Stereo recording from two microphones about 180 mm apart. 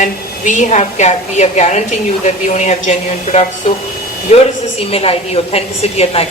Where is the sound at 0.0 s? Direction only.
45° left (ahead or behind).